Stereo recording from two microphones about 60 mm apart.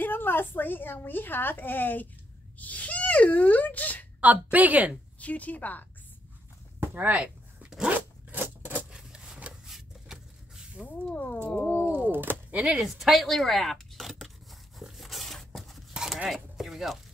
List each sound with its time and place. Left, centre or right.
0.0 s a woman's voice: left
4.2 s a woman's voice: right
5.2 s speech: left
6.8 s speech: right
7.9 s zipper: right
8.9 s a sound: centre
9.7 s vehicle: centre
10.8 s speech: left
11.8 s a sound: right
12.6 s speech: centre
14.8 s a sound: centre
15.9 s a sound: centre
16.5 s sheep: centre